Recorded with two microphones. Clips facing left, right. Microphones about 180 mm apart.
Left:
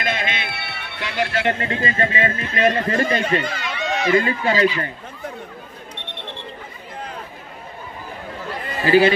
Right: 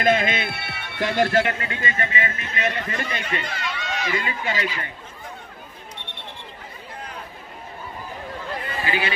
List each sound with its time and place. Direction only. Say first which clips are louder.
0.0 s a man's voice: right 5 dB; 45° right (ahead or behind)
1.4 s a man's voice: left 4 dB; 30° left (ahead or behind)
2.8 s a man's voice: left 9 dB; 45° left (ahead or behind)
8.8 s a man's voice: left 13 dB; 40° left (ahead or behind)